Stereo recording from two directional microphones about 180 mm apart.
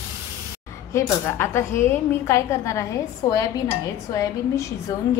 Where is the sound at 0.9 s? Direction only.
15° left (ahead or behind).